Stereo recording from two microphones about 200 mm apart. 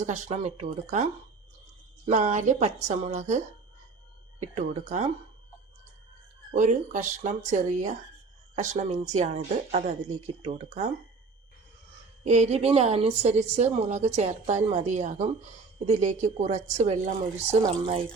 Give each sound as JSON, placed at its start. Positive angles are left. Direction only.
{"t": 0.0, "sound": "a woman's voice", "side_deg": -35}
{"t": 4.5, "sound": "a woman's voice", "side_deg": -35}
{"t": 6.5, "sound": "a woman's voice", "side_deg": -40}
{"t": 12.2, "sound": "a woman's voice", "side_deg": -35}